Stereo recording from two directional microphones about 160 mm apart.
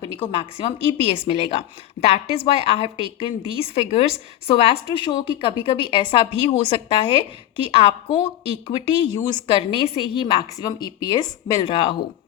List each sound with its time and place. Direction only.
0.0 s a woman's voice: 35° left (ahead or behind)
9.0 s a woman's voice: 30° left (ahead or behind)